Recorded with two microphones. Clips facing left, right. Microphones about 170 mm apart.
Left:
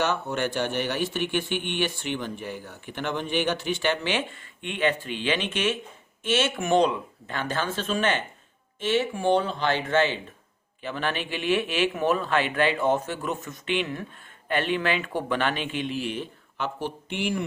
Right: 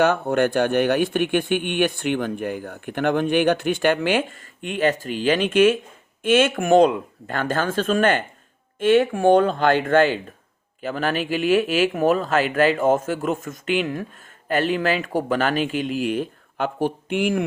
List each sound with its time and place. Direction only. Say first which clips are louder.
0.0 s speech: right 8 dB; 55° right (ahead or behind)